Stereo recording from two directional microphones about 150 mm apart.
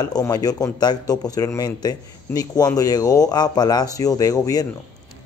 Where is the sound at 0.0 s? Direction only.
25° left (ahead or behind).